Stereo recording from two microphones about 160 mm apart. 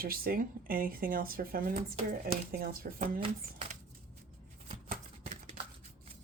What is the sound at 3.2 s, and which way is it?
Speech, 40° right (ahead or behind).